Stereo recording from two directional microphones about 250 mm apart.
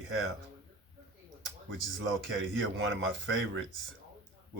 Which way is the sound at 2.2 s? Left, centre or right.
Right.